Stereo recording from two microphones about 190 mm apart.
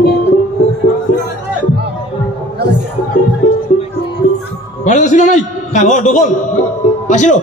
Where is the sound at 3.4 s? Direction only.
45° left (ahead or behind).